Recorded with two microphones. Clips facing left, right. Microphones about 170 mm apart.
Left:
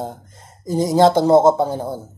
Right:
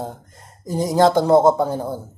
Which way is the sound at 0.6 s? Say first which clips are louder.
Left 3 dB; 5° right (ahead or behind).